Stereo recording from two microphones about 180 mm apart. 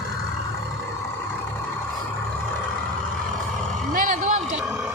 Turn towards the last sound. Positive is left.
turn(degrees=-45)  # may be behind; listen again after turning